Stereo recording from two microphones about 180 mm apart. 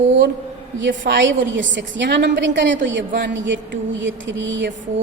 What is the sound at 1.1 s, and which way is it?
A woman's voice, 90° right.